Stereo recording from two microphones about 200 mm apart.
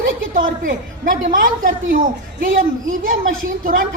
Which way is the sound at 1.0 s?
45° right (ahead or behind).